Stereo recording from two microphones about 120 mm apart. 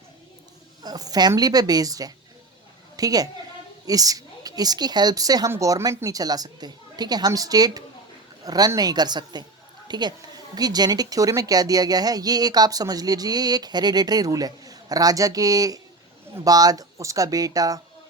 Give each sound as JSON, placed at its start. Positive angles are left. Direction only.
{"t": 0.8, "sound": "a woman's voice", "side_deg": -35}